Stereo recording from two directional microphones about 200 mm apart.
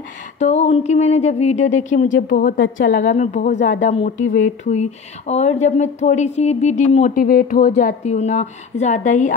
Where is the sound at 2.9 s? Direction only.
35° left (ahead or behind).